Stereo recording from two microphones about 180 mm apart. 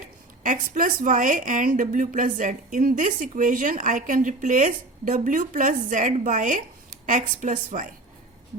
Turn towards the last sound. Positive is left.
turn(degrees=-45)  # may be behind; listen again after turning